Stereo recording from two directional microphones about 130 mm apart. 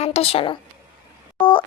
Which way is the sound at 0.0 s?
50° left (ahead or behind).